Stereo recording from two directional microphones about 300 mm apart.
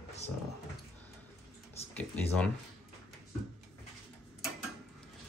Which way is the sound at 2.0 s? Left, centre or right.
Centre.